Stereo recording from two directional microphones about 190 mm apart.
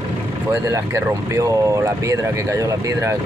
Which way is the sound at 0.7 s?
15° right (ahead or behind).